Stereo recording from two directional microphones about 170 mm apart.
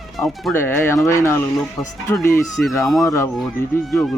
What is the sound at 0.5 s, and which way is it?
Speech, 15° left (ahead or behind).